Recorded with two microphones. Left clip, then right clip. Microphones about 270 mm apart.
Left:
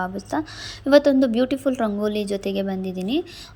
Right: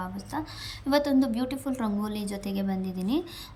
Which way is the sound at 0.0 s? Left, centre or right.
Centre.